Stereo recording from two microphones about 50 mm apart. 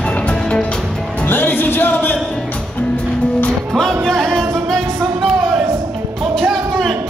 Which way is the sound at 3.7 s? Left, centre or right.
Centre.